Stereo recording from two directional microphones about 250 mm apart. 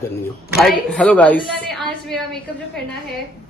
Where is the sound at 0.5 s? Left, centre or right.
Centre.